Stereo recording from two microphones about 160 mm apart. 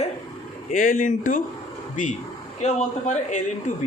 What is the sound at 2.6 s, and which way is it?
A man's voice, 45° left (ahead or behind).